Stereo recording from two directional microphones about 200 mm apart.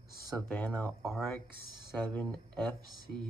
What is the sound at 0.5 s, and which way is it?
Speech, 5° left (ahead or behind).